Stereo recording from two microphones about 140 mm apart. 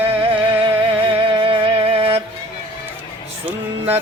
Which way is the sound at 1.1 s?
40° right (ahead or behind).